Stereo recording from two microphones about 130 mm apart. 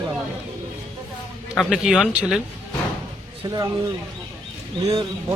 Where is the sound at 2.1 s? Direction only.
5° right (ahead or behind).